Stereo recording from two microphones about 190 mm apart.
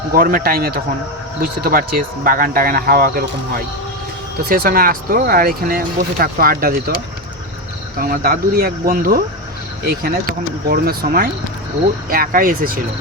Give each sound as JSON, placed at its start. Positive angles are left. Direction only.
{"t": 0.1, "sound": "speech", "side_deg": -50}
{"t": 7.9, "sound": "speech", "side_deg": -50}